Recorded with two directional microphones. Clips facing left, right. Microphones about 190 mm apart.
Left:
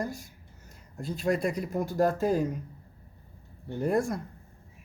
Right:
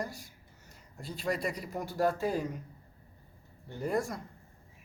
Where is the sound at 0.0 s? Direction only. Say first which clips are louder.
Left 5 dB; 45° left (ahead or behind).